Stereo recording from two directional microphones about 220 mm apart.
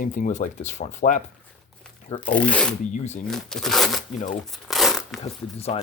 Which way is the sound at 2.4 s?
5° left (ahead or behind).